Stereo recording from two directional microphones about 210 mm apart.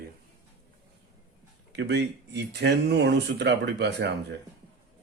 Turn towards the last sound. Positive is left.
turn(degrees=-55)  # may be behind; listen again after turning